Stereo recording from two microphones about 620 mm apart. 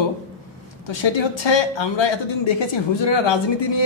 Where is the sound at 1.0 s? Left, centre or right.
Left.